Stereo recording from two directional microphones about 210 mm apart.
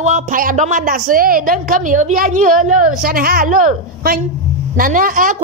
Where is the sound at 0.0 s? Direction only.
40° right (ahead or behind).